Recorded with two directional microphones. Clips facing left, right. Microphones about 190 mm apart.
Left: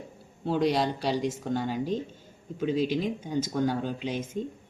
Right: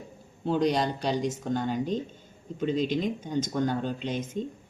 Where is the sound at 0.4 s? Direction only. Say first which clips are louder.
Even; 5° left (ahead or behind).